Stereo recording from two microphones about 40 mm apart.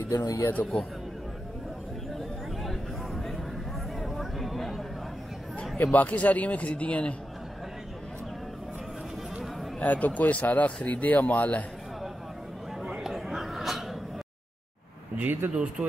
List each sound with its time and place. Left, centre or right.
0.0 s speech: left
2.1 s a sound: centre
5.9 s a man's voice: left
9.8 s a man's voice: left
13.3 s a sound: centre
15.1 s speech: right
15.5 s speech: right